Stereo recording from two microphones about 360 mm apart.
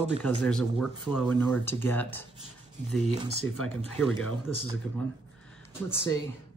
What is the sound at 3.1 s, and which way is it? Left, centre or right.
Speech, centre.